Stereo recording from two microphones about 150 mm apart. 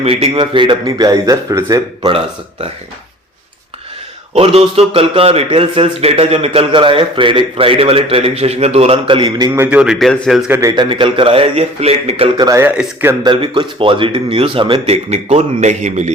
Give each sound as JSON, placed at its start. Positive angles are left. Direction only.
{"t": 0.0, "sound": "speech", "side_deg": -40}
{"t": 2.0, "sound": "a man's voice", "side_deg": -40}
{"t": 4.4, "sound": "a man's voice", "side_deg": -40}
{"t": 9.6, "sound": "speech", "side_deg": -5}
{"t": 10.5, "sound": "speech", "side_deg": -20}
{"t": 10.8, "sound": "a man's voice", "side_deg": -35}
{"t": 12.4, "sound": "speech", "side_deg": -25}
{"t": 12.6, "sound": "speech", "side_deg": -15}
{"t": 13.2, "sound": "a man's voice", "side_deg": -35}
{"t": 15.1, "sound": "a man's voice", "side_deg": -45}